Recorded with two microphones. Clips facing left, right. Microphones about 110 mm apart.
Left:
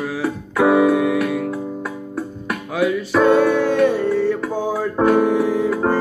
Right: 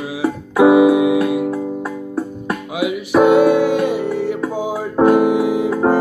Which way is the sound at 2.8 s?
15° right (ahead or behind).